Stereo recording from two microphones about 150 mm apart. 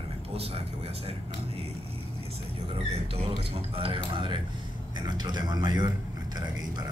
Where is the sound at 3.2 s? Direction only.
40° right (ahead or behind).